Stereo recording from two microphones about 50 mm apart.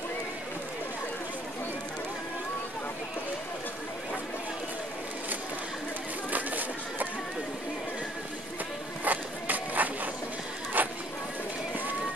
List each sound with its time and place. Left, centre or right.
6.3 s run: right
9.0 s run: right
10.8 s a sound: right